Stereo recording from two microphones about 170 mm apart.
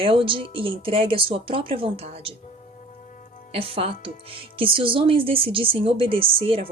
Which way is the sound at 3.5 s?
35° right (ahead or behind).